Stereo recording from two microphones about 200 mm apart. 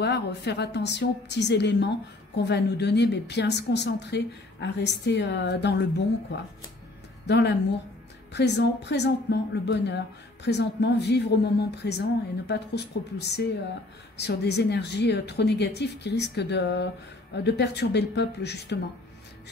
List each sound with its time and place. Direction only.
0.0 s a woman's voice: 60° left (ahead or behind)
7.2 s a woman's voice: 60° left (ahead or behind)